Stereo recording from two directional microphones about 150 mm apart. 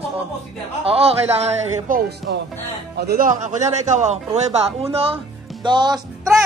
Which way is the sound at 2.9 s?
80° right.